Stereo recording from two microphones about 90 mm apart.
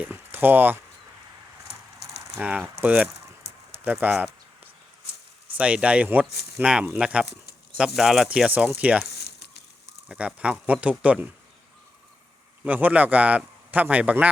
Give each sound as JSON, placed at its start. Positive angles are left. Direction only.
{"t": 0.0, "sound": "a sound", "side_deg": -20}
{"t": 2.8, "sound": "speech", "side_deg": -15}
{"t": 3.7, "sound": "a sound", "side_deg": -25}
{"t": 5.5, "sound": "speech", "side_deg": -10}
{"t": 8.3, "sound": "speech", "side_deg": -15}
{"t": 10.1, "sound": "speech", "side_deg": -15}
{"t": 12.6, "sound": "speech", "side_deg": -15}